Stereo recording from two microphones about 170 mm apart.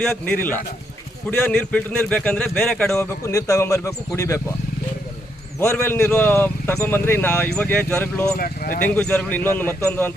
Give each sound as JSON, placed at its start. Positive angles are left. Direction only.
{"t": 0.0, "sound": "speech", "side_deg": 5}
{"t": 3.0, "sound": "speech", "side_deg": 15}
{"t": 5.5, "sound": "speech", "side_deg": 15}
{"t": 8.4, "sound": "speech", "side_deg": 60}
{"t": 8.9, "sound": "speech", "side_deg": 10}